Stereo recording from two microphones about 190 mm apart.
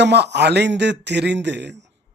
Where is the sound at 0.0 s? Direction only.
65° right (ahead or behind).